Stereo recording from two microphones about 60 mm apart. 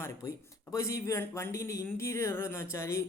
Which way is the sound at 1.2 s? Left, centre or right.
Left.